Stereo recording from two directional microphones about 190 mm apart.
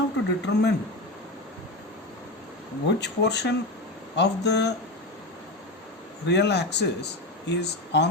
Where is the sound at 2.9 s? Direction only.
60° left (ahead or behind).